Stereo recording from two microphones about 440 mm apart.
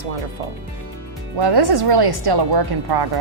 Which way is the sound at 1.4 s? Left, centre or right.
Right.